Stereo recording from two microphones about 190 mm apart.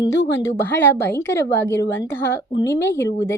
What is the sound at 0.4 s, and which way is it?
A woman's voice, 10° left (ahead or behind).